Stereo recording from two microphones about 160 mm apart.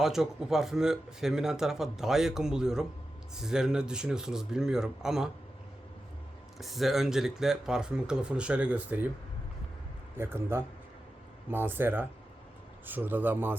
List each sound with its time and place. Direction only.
0.0 s speech: 5° right (ahead or behind)
6.6 s speech: centre (ahead or behind)
10.2 s speech: 15° right (ahead or behind)